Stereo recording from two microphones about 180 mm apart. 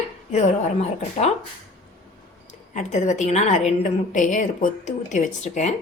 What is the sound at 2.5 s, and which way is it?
A woman's voice, 40° left (ahead or behind).